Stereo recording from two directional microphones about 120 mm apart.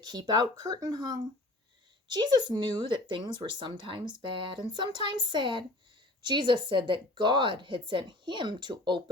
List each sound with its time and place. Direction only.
0.0 s speech: 35° right (ahead or behind)